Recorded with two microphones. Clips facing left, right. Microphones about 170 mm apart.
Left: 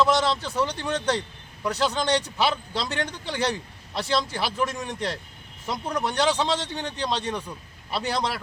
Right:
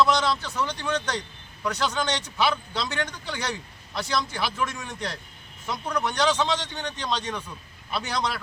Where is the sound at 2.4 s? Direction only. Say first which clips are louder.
Even; 30° left (ahead or behind).